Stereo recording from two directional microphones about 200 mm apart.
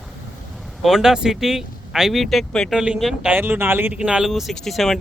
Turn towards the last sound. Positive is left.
turn(degrees=0)  # may be behind; listen again after turning